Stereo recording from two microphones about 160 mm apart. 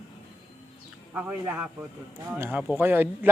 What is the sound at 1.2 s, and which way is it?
Speech, 10° right (ahead or behind).